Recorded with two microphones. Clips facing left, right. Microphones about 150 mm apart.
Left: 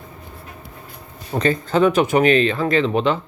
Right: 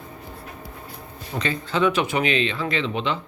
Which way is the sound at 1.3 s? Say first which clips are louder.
Left 7 dB; 45° left (ahead or behind).